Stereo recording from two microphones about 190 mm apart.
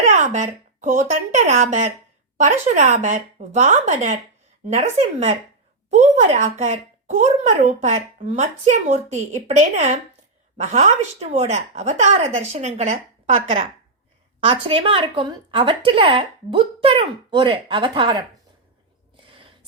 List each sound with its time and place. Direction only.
0.0 s speech: 40° right (ahead or behind)
14.4 s speech: 30° right (ahead or behind)
19.1 s a sound: 25° right (ahead or behind)